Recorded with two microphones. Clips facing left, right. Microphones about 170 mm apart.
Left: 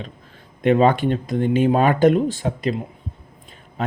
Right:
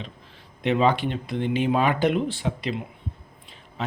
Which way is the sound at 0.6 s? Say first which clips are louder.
Left 5 dB; 50° left (ahead or behind).